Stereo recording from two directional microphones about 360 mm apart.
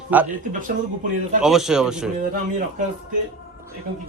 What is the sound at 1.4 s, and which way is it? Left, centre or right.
Speech, centre.